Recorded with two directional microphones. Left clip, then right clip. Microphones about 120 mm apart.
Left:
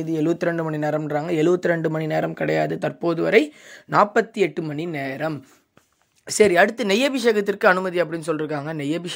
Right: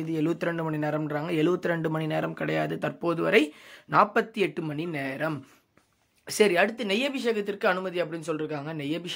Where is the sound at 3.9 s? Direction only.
40° left (ahead or behind).